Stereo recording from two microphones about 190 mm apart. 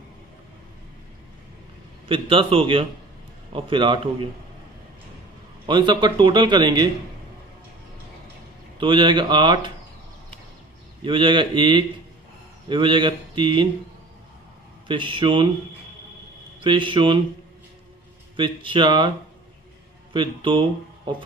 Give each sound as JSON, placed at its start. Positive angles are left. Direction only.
{"t": 2.0, "sound": "a man's voice", "side_deg": -30}
{"t": 5.7, "sound": "a man's voice", "side_deg": -25}
{"t": 8.7, "sound": "a man's voice", "side_deg": -25}
{"t": 11.1, "sound": "a man's voice", "side_deg": -25}
{"t": 14.9, "sound": "a man's voice", "side_deg": -25}
{"t": 16.6, "sound": "a man's voice", "side_deg": -25}
{"t": 18.3, "sound": "a man's voice", "side_deg": -25}